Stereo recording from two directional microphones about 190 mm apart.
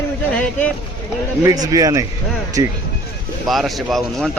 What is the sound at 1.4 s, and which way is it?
Speech, 20° right (ahead or behind).